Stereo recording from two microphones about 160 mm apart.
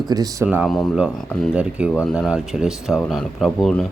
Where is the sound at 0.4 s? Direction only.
5° right (ahead or behind).